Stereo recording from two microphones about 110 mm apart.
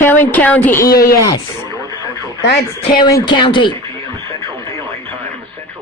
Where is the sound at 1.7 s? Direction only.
35° right (ahead or behind).